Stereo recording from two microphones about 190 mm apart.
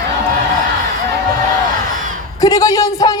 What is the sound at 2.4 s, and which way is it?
Speech, 20° left (ahead or behind).